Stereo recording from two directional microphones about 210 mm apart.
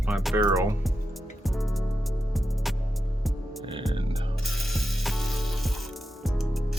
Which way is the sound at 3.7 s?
25° right (ahead or behind).